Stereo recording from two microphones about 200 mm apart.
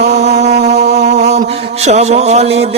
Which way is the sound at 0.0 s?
35° right (ahead or behind).